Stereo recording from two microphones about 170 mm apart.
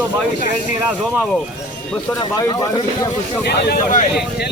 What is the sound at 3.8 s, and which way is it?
Speech, 45° left (ahead or behind).